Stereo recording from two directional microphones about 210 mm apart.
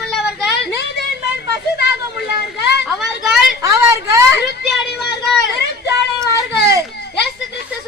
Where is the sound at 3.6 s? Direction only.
15° right (ahead or behind).